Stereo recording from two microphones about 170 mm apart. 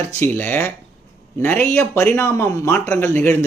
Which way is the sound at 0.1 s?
10° left (ahead or behind).